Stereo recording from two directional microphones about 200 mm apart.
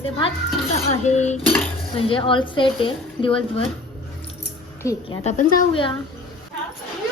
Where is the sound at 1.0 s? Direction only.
35° left (ahead or behind).